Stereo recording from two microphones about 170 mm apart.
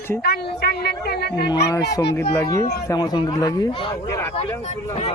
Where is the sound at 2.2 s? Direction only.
15° left (ahead or behind).